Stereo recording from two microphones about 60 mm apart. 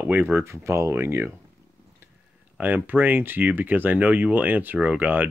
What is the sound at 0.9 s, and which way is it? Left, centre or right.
Speech, right.